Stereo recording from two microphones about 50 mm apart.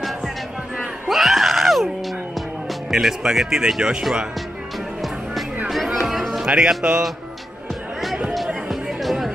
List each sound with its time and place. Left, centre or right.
0.7 s a sound: centre
2.9 s speech: centre
6.0 s run: centre
6.4 s speech: centre
8.6 s music: centre